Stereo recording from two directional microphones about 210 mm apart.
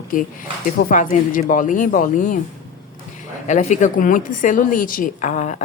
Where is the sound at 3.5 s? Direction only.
35° left (ahead or behind).